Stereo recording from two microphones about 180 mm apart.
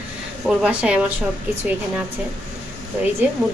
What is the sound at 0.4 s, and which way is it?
Speech, 5° right (ahead or behind).